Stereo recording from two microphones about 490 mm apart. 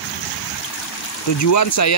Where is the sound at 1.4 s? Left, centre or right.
Left.